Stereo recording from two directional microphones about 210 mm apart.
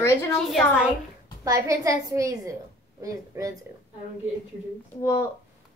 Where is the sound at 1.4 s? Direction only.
15° right (ahead or behind).